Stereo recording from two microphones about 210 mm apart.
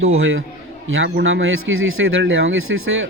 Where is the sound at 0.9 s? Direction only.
60° right (ahead or behind).